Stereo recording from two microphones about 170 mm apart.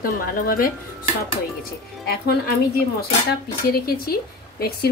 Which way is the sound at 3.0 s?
65° left (ahead or behind).